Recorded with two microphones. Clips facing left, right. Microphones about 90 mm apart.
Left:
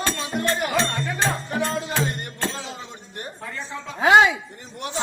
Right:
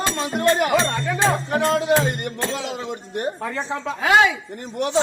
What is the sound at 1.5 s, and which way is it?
Music, 80° right.